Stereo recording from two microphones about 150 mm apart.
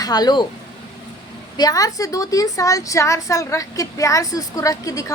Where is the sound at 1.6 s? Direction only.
25° left (ahead or behind).